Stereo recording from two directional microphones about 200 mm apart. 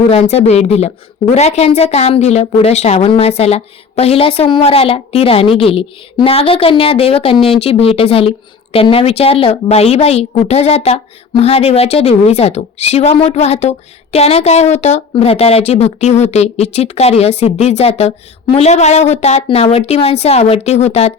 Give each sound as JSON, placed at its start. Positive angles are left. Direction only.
{"t": 0.1, "sound": "a woman's voice", "side_deg": 30}